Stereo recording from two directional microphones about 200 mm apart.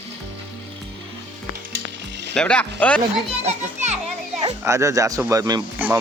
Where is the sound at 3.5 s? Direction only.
35° right (ahead or behind).